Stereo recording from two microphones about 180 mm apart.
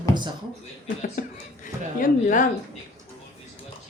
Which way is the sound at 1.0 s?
50° left (ahead or behind).